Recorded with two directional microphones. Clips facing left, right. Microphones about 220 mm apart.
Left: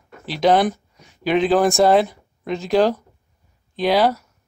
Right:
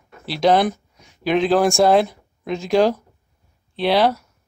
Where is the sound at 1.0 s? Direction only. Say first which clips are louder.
Even; 5° left (ahead or behind).